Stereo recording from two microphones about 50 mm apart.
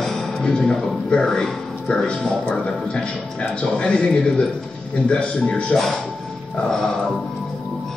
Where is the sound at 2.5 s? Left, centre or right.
Centre.